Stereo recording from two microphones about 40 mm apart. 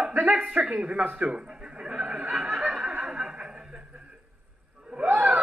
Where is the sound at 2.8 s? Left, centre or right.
Right.